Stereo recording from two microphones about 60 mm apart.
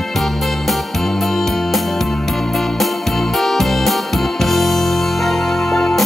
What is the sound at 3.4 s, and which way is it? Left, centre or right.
Music, centre.